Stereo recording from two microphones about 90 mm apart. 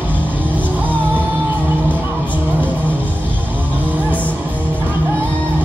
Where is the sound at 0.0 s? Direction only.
20° right (ahead or behind).